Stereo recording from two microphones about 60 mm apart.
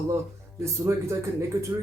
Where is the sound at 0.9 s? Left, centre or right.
Right.